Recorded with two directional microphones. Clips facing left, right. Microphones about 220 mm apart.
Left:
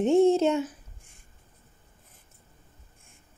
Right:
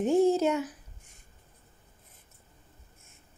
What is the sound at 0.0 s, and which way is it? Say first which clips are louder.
Speech: left 3 dB; 25° left (ahead or behind).